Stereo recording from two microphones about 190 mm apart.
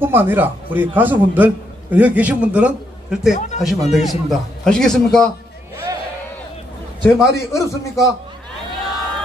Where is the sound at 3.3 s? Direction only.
35° left (ahead or behind).